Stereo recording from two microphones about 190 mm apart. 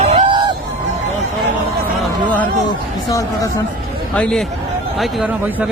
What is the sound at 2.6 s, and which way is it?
Speech, 15° left (ahead or behind).